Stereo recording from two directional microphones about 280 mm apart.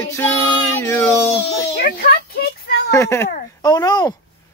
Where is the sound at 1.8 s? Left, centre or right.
Left.